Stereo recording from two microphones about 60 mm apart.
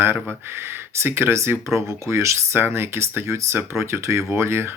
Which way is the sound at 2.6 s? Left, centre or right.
Right.